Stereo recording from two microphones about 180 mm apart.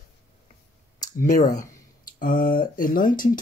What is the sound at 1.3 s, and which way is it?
Speech, 45° left (ahead or behind).